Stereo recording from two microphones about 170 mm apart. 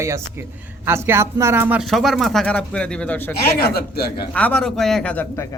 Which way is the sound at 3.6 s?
65° left (ahead or behind).